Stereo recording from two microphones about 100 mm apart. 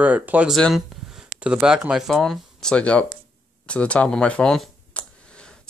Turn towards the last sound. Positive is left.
turn(degrees=5)  # may be behind; listen again after turning